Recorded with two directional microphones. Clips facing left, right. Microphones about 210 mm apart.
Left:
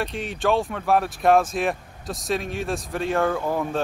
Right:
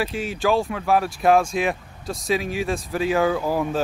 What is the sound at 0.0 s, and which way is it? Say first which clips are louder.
Speech: right 2 dB; centre (ahead or behind).